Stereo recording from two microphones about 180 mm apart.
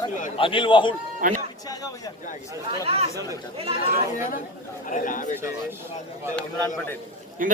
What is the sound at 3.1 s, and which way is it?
Speech, 20° right (ahead or behind).